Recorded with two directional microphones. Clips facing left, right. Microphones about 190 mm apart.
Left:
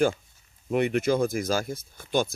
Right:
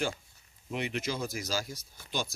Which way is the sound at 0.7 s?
55° left (ahead or behind).